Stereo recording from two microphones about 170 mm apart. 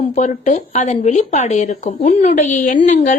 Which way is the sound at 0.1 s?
45° left (ahead or behind).